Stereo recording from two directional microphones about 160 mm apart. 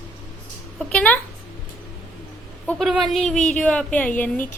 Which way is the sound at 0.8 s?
5° left (ahead or behind).